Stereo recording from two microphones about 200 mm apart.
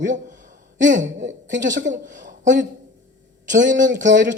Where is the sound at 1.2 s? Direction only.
60° right (ahead or behind).